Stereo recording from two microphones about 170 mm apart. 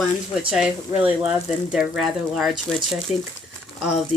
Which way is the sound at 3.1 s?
40° left (ahead or behind).